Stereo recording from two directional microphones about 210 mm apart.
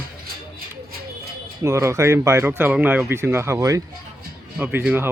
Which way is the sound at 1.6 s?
15° right (ahead or behind).